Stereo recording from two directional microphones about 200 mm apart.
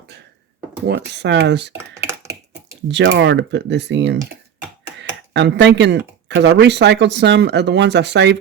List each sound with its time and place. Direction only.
0.9 s speech: 60° right (ahead or behind)
2.9 s speech: 60° right (ahead or behind)
4.9 s a sound: 65° right (ahead or behind)
6.2 s speech: 60° right (ahead or behind)